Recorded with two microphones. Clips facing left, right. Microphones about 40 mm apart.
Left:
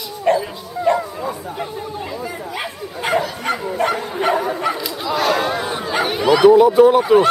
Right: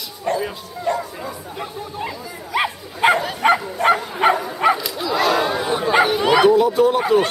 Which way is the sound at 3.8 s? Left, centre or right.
Left.